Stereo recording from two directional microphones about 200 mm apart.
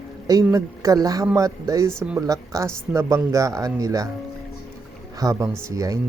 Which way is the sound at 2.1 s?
15° right (ahead or behind).